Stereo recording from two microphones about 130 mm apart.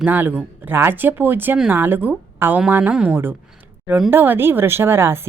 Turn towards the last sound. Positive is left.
turn(degrees=-20)  # may be behind; listen again after turning